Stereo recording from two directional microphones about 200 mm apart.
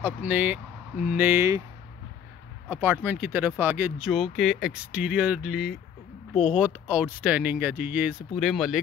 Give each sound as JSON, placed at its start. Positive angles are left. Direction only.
{"t": 0.0, "sound": "speech", "side_deg": -10}
{"t": 2.7, "sound": "speech", "side_deg": -10}